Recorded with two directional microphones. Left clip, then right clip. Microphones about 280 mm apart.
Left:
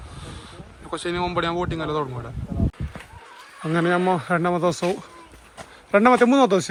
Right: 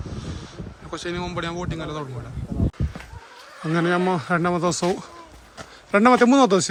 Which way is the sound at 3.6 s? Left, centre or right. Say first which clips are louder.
Left 1 dB; centre.